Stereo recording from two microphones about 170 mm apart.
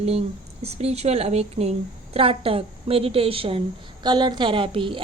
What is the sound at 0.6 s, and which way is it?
A woman's voice, 35° right (ahead or behind).